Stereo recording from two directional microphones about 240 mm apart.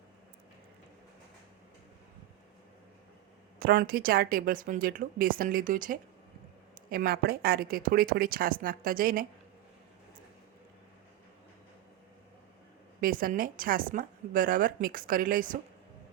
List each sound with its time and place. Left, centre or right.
3.6 s a woman's voice: right
13.0 s a woman's voice: right